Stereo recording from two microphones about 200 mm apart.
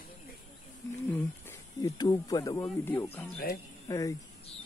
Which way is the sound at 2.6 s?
10° left (ahead or behind).